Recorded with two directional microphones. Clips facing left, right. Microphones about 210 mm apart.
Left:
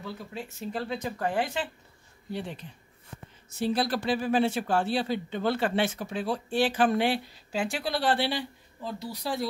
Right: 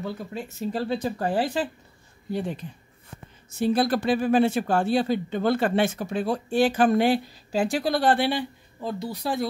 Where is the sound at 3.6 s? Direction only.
50° right (ahead or behind).